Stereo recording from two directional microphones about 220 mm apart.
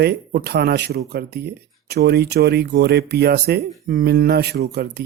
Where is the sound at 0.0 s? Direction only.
45° right (ahead or behind).